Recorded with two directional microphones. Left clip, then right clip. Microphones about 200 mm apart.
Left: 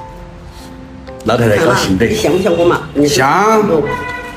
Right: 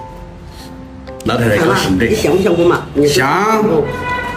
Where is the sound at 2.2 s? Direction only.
10° right (ahead or behind).